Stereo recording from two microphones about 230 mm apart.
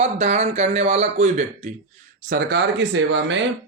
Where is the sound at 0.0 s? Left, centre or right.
Right.